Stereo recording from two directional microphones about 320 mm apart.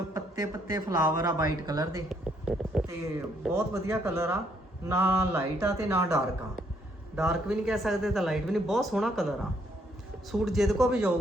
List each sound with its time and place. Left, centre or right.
0.1 s speech: centre
7.2 s speech: centre
10.4 s speech: centre